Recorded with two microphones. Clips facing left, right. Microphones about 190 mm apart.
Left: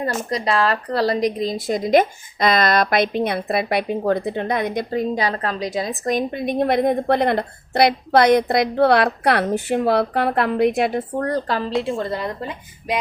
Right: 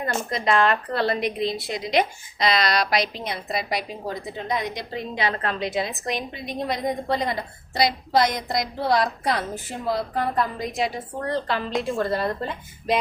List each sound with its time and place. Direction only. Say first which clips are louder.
0.2 s a woman's voice: right 2 dB; 35° left (ahead or behind); by 12.5 s 20° left (ahead or behind)